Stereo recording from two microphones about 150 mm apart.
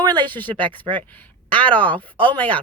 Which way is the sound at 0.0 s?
30° right (ahead or behind).